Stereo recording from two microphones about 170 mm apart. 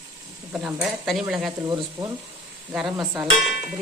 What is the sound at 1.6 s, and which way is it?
Speech, 20° right (ahead or behind).